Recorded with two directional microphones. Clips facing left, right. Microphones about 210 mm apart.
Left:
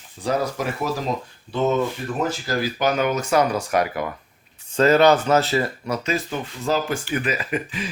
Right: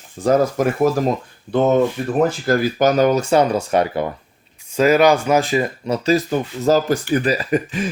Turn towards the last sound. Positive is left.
turn(degrees=-45)  # may be behind; listen again after turning